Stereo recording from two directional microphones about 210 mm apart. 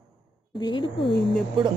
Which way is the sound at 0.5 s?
20° left (ahead or behind).